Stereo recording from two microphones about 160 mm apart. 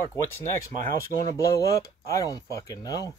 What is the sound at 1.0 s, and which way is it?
Speech, 20° left (ahead or behind).